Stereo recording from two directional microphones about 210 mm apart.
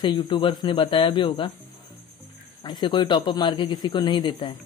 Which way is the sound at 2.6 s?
20° left (ahead or behind).